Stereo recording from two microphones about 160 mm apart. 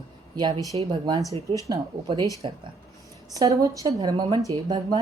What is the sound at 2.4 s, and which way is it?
Speech, 35° right (ahead or behind).